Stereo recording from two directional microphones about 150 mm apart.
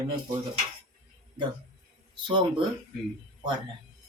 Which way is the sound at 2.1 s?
35° right (ahead or behind).